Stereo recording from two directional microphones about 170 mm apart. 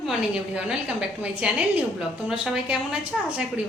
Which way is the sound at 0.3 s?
5° right (ahead or behind).